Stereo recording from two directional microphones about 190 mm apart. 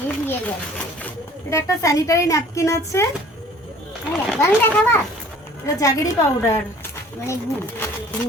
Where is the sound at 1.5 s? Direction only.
15° left (ahead or behind).